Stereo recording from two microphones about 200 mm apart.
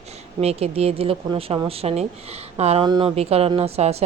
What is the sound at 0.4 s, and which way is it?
A woman's voice, 30° right (ahead or behind).